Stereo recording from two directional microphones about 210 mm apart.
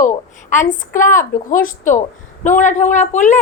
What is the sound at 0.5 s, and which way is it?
A man's voice, 35° left (ahead or behind).